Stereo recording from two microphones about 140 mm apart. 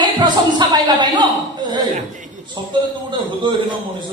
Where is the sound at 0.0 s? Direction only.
30° right (ahead or behind).